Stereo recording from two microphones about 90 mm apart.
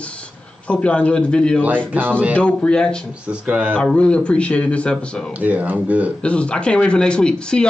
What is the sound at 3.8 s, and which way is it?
Speech, 10° left (ahead or behind).